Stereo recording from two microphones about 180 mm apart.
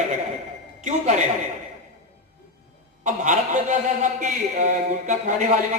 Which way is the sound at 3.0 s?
45° right (ahead or behind).